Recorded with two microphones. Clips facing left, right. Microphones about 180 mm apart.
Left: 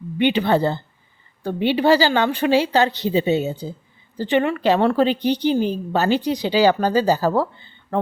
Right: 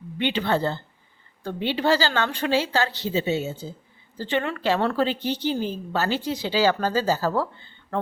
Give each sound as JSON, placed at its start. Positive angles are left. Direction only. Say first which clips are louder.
{"t": 0.2, "sound": "a woman's voice", "louder": "left 6 dB", "side_deg": 15}